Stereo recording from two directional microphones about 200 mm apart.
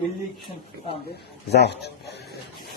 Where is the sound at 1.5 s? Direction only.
55° left (ahead or behind).